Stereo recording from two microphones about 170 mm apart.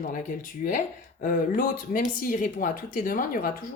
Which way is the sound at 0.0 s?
50° left (ahead or behind).